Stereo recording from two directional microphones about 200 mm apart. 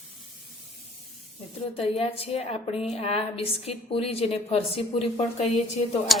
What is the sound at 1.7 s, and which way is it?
A woman's voice, 30° left (ahead or behind).